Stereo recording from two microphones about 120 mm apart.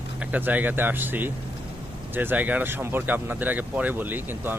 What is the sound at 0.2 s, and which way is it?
Speech, 15° right (ahead or behind).